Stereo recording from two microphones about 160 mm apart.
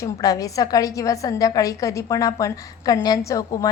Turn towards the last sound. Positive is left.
turn(degrees=20)  # may be behind; listen again after turning